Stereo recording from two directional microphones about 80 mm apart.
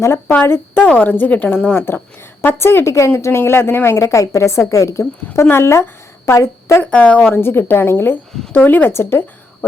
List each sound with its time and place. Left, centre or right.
0.0 s a woman's voice: left
6.9 s a woman's voice: centre; by 9.2 s left